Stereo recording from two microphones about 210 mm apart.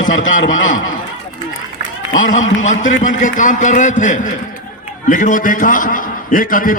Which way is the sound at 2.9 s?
40° left (ahead or behind).